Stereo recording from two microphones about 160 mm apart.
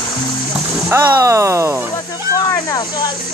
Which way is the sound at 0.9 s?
15° right (ahead or behind).